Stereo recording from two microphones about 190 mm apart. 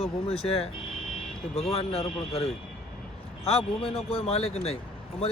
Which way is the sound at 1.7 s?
30° left (ahead or behind).